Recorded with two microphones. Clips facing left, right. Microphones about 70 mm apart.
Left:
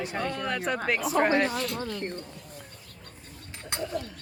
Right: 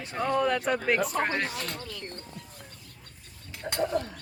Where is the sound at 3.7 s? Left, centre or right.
Right.